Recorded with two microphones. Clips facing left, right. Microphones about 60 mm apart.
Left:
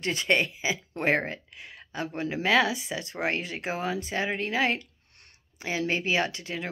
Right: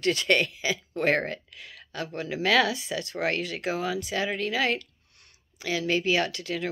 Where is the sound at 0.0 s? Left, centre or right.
Left.